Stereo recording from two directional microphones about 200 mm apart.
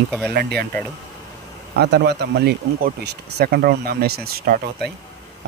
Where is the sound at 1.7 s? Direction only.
55° right (ahead or behind).